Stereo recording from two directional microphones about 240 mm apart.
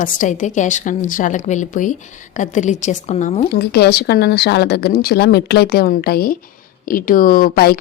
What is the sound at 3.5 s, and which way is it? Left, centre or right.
Speech, left.